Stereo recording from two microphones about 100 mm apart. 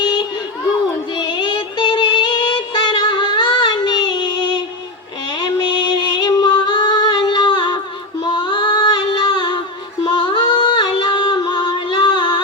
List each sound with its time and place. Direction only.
0.0 s a sound: 50° left (ahead or behind)
1.1 s music: 50° left (ahead or behind)
6.0 s music: 50° left (ahead or behind)
8.2 s female singing: 50° left (ahead or behind)
10.0 s singing: 50° left (ahead or behind)